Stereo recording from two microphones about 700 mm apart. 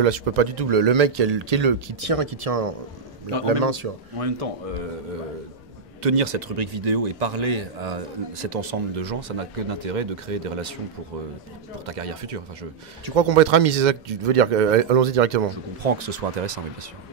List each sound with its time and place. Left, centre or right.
0.0 s speech: right
6.0 s a man's voice: right
11.8 s speech: right
15.5 s a man's voice: right